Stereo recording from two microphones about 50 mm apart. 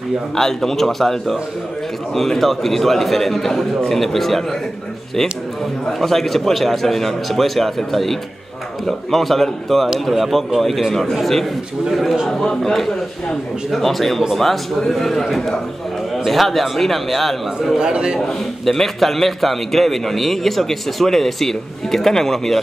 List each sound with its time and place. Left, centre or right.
0.4 s a man's voice: centre
5.9 s a man's voice: centre
17.7 s a man's voice: centre
18.7 s a man's voice: centre